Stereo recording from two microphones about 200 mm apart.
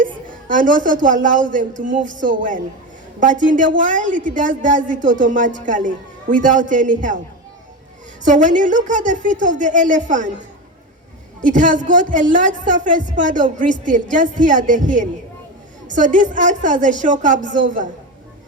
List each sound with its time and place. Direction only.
0.0 s a woman's voice: 40° right (ahead or behind)
8.2 s a woman's voice: 40° right (ahead or behind)
11.4 s a woman's voice: 40° right (ahead or behind)